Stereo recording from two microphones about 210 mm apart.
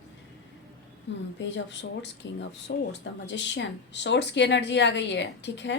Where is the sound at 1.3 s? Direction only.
60° left (ahead or behind).